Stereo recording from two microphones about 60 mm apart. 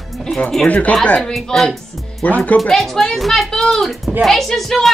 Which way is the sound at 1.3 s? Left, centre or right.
Centre.